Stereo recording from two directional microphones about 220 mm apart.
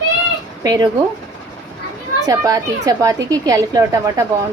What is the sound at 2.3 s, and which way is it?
A woman's voice, 15° right (ahead or behind).